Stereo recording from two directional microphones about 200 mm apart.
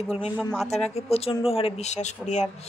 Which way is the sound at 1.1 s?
30° left (ahead or behind).